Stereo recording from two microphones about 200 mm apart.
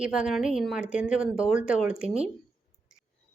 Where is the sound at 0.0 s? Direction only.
5° right (ahead or behind).